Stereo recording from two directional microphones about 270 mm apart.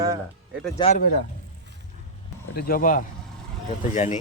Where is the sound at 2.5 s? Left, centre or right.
Left.